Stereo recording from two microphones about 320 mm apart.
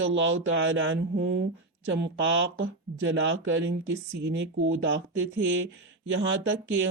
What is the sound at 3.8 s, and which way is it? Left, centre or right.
Speech, right.